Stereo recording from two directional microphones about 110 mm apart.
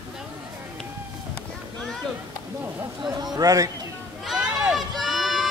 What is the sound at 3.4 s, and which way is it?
Speech, 35° right (ahead or behind).